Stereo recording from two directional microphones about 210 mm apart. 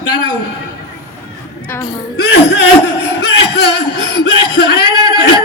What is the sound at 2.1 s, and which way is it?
Speech, 55° left (ahead or behind).